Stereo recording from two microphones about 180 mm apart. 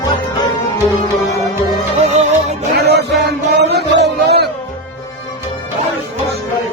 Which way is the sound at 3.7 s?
70° right (ahead or behind).